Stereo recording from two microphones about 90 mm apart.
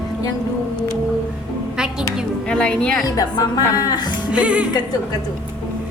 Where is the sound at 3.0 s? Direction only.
45° left (ahead or behind).